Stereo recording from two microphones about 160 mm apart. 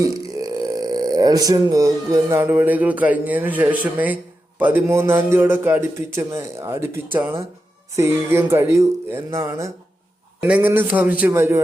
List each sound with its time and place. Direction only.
0.0 s speech: 20° right (ahead or behind)